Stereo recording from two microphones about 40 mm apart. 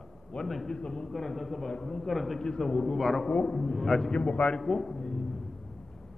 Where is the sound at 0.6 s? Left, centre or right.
Left.